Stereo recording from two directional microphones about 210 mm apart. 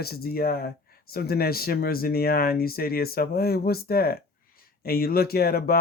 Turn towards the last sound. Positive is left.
turn(degrees=45)  # may be behind; listen again after turning